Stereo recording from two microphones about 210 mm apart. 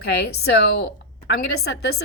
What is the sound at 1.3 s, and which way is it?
Speech, 50° left (ahead or behind).